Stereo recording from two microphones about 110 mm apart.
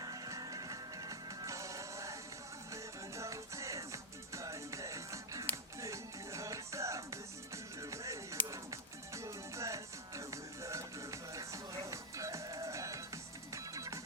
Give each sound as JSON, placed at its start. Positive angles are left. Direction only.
{"t": 0.0, "sound": "music", "side_deg": -35}